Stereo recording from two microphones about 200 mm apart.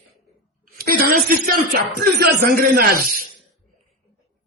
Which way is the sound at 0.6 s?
45° right (ahead or behind).